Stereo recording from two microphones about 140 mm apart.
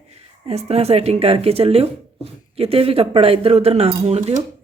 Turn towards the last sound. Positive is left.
turn(degrees=-50)  # may be behind; listen again after turning